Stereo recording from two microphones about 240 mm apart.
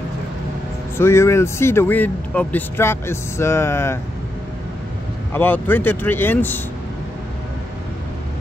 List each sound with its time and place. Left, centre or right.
0.9 s speech: centre
5.3 s speech: centre